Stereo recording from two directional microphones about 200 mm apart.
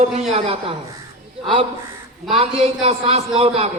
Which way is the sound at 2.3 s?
30° right (ahead or behind).